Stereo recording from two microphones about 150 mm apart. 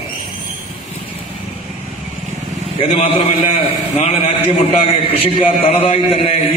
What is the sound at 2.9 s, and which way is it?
A man's voice, 45° left (ahead or behind).